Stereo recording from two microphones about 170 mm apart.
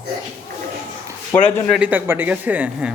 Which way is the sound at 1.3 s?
15° left (ahead or behind).